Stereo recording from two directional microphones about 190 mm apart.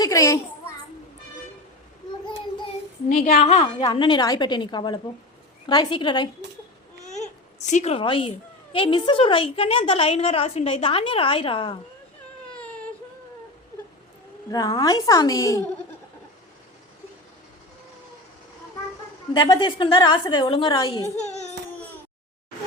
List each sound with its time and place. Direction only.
0.0 s a sound: 15° left (ahead or behind)
3.1 s a woman's voice: 40° left (ahead or behind)
3.8 s a woman's voice: 25° left (ahead or behind)
7.0 s babbling: 40° left (ahead or behind)
8.7 s a woman's voice: 25° left (ahead or behind)
14.5 s a woman's voice: 20° left (ahead or behind)
19.3 s a woman's voice: 25° left (ahead or behind)